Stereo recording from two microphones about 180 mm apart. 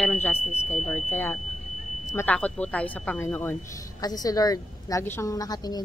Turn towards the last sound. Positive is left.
turn(degrees=20)  # may be behind; listen again after turning